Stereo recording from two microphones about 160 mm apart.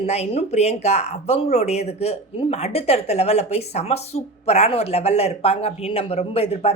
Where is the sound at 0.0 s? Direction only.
40° left (ahead or behind).